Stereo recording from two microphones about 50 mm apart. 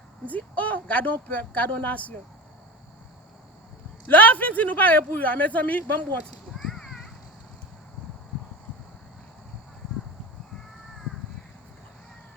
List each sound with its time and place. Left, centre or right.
0.3 s speech: left
4.1 s speech: left